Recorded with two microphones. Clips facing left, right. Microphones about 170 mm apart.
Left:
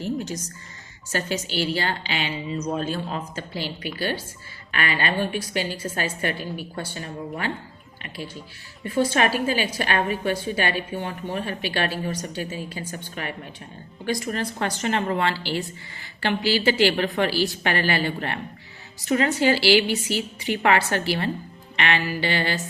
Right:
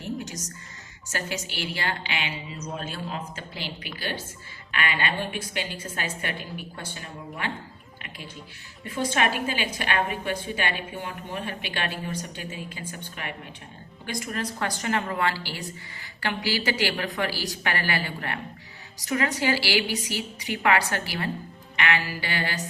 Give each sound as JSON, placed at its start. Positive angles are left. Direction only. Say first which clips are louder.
{"t": 0.2, "sound": "music", "louder": "left 5 dB", "side_deg": 30}
{"t": 1.1, "sound": "a woman's voice", "louder": "left 6 dB", "side_deg": 30}
{"t": 4.7, "sound": "a woman's voice", "louder": "left 3 dB", "side_deg": 40}